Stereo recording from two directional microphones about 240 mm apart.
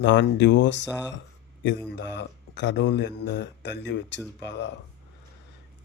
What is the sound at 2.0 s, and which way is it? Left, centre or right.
Speech, left.